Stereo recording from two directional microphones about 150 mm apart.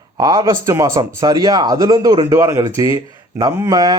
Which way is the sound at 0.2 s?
25° right (ahead or behind).